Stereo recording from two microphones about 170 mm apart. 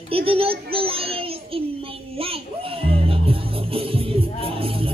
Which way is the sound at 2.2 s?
35° right (ahead or behind).